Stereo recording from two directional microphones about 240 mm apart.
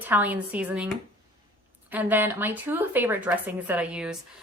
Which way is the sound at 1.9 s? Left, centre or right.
Centre.